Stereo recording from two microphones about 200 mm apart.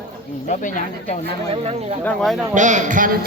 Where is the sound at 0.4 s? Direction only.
40° left (ahead or behind).